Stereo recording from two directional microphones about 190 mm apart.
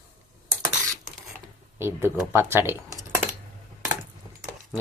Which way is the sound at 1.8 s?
15° right (ahead or behind).